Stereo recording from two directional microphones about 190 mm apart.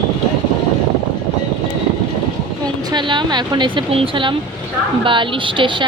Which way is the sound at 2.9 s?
25° right (ahead or behind).